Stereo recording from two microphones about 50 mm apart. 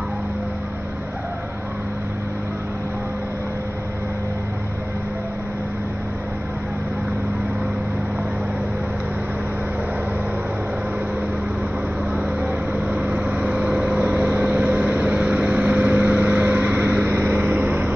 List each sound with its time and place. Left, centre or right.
12.9 s vehicle: right
14.0 s vehicle: right